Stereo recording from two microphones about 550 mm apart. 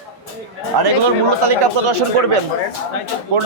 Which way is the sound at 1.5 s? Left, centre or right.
Right.